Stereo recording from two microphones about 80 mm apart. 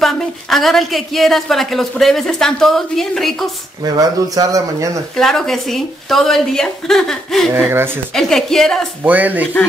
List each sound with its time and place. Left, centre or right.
0.0 s speech: centre
3.8 s speech: right
5.1 s speech: centre
7.7 s speech: right
8.1 s speech: centre
9.0 s speech: right